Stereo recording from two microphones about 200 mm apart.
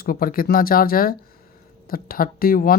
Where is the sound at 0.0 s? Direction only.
45° left (ahead or behind).